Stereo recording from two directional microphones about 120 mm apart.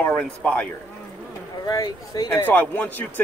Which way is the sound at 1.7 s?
30° left (ahead or behind).